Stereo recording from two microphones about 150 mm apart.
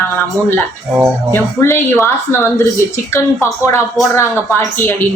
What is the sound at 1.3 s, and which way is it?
Speech, 15° left (ahead or behind).